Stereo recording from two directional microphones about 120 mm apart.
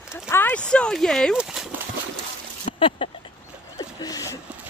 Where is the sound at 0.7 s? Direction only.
5° left (ahead or behind).